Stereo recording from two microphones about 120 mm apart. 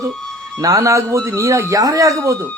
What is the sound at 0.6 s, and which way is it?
A man's voice, 25° right (ahead or behind).